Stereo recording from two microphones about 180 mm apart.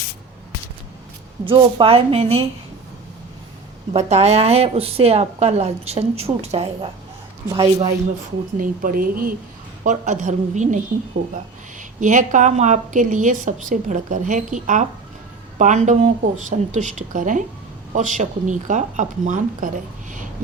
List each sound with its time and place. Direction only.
1.5 s a woman's voice: 30° right (ahead or behind)
3.9 s a woman's voice: 35° right (ahead or behind)
8.5 s a woman's voice: 50° right (ahead or behind)